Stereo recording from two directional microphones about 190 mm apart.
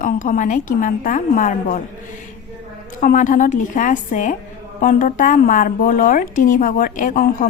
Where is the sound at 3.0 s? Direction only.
45° left (ahead or behind).